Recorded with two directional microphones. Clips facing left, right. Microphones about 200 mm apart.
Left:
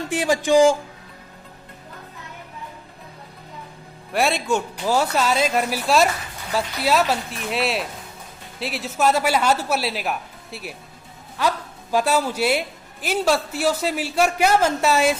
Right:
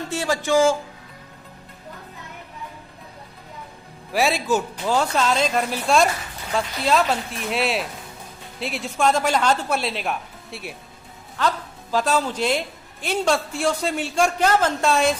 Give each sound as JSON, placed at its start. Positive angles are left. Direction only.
{"t": 0.1, "sound": "a woman's voice", "side_deg": 15}
{"t": 4.1, "sound": "a woman's voice", "side_deg": 0}
{"t": 11.3, "sound": "a woman's voice", "side_deg": 10}